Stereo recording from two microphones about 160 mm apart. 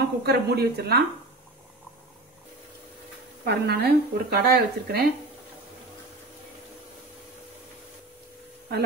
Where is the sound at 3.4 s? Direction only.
90° right.